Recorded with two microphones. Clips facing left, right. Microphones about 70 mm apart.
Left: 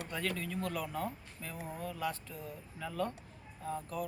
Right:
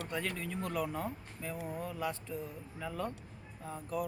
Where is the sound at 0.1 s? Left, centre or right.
Centre.